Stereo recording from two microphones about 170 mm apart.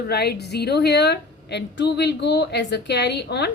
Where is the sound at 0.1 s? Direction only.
70° left (ahead or behind).